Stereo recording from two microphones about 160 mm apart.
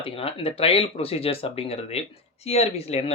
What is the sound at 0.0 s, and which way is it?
Speech, 35° left (ahead or behind).